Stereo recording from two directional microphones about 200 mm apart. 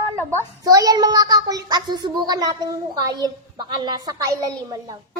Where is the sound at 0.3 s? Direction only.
15° right (ahead or behind).